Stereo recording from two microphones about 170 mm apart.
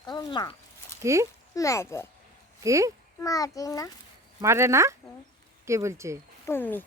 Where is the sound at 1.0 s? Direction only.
15° right (ahead or behind).